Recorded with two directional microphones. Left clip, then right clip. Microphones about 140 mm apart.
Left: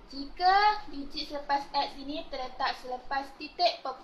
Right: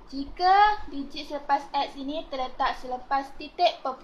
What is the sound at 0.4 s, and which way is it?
A child's voice, 80° right.